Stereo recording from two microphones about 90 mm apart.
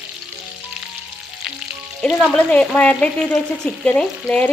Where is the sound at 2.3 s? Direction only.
15° left (ahead or behind).